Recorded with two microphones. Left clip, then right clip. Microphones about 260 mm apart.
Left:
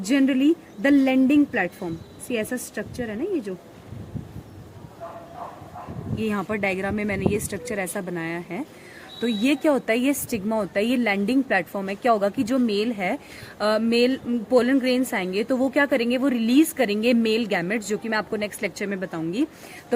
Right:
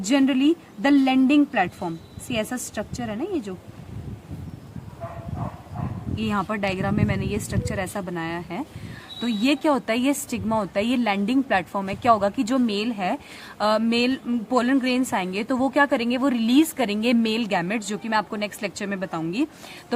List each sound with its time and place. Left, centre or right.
0.0 s a woman's voice: centre
6.2 s a woman's voice: centre